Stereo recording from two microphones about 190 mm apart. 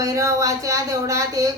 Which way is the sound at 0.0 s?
15° right (ahead or behind).